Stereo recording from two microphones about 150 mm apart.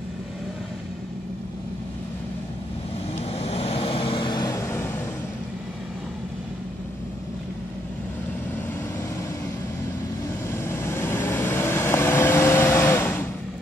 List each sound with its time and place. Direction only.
3.2 s vehicle: 40° left (ahead or behind); by 5.0 s 15° left (ahead or behind)
10.5 s vehicle: 15° left (ahead or behind)